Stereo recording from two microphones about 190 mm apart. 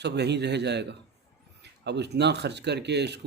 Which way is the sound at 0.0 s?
60° right (ahead or behind).